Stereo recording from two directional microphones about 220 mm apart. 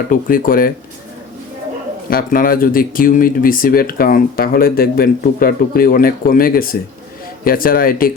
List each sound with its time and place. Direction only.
0.1 s speech: 40° left (ahead or behind)
2.0 s speech: 40° left (ahead or behind)